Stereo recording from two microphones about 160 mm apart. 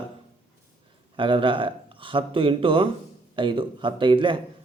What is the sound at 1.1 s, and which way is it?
A man's voice, 30° right (ahead or behind).